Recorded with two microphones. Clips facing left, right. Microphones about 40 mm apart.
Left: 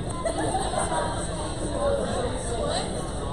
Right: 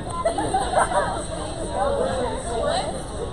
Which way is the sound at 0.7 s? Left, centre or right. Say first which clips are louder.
Right 7 dB; right.